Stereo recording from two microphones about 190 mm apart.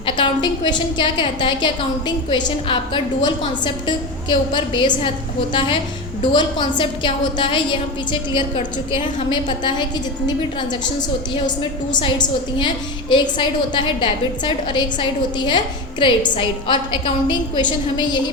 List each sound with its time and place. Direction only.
0.0 s a woman's voice: 25° left (ahead or behind)
11.9 s a woman's voice: 25° left (ahead or behind)